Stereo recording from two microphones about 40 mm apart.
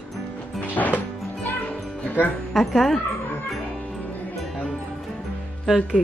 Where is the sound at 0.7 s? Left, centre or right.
Left.